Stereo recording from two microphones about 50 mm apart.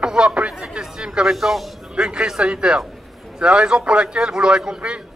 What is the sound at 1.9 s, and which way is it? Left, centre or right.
A man's voice, centre.